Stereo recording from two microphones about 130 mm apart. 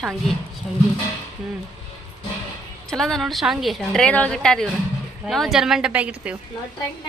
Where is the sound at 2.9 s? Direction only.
5° left (ahead or behind).